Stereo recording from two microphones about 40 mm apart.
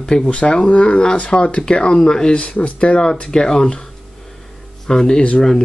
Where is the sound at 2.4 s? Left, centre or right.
Left.